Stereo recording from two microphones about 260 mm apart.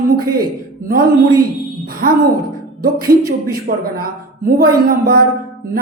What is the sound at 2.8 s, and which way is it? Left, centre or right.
A woman's voice, right.